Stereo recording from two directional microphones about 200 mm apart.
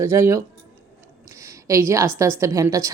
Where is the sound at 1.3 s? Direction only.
15° right (ahead or behind).